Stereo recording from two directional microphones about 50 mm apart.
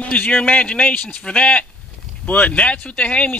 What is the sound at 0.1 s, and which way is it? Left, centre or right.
Speech, left.